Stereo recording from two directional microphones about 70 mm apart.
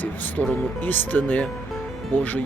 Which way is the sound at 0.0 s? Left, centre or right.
Left.